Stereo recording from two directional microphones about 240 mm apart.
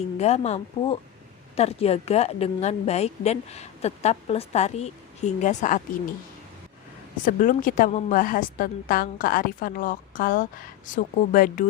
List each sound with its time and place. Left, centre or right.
0.2 s a woman's voice: left
7.3 s a woman's voice: left